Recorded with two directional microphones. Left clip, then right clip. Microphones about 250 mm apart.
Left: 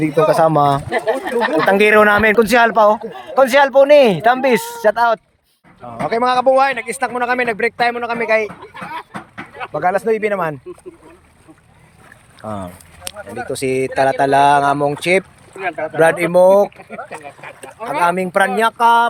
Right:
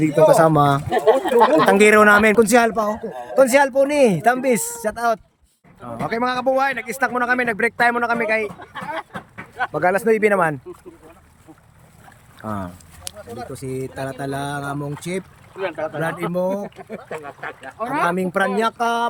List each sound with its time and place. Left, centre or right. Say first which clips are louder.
0.0 s a man's voice: even; centre
1.1 s speech: right 5 dB; right
1.6 s a man's voice: left 2 dB; centre
5.8 s a man's voice: left 5 dB; centre
9.6 s a man's voice: left 1 dB; centre
12.4 s speech: left 2 dB; centre
13.5 s a man's voice: left 13 dB; centre
13.9 s a sound: left 14 dB; centre
15.9 s a sound: left 11 dB; centre
18.0 s a man's voice: left 6 dB; centre